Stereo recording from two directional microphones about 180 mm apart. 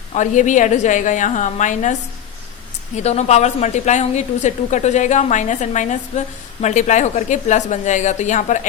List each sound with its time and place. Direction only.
0.1 s a woman's voice: 40° left (ahead or behind)
3.0 s speech: 40° left (ahead or behind)